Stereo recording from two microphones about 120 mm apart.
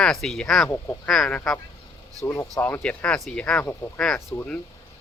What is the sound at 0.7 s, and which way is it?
Speech, 20° left (ahead or behind).